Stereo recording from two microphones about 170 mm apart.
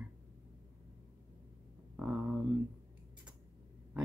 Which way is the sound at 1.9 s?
5° right (ahead or behind).